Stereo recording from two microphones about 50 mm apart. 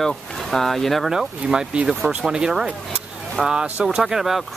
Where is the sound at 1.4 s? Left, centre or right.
Right.